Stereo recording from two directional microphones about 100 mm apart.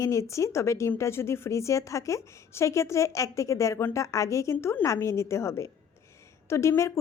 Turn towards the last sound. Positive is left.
turn(degrees=30)  # may be behind; listen again after turning